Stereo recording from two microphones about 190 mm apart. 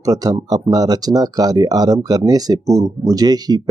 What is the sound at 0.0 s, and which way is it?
Speech, 20° right (ahead or behind).